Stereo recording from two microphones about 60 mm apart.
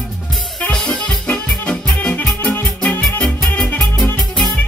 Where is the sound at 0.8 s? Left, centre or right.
Centre.